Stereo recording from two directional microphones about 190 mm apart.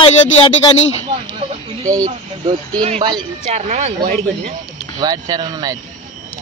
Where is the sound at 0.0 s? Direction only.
30° left (ahead or behind).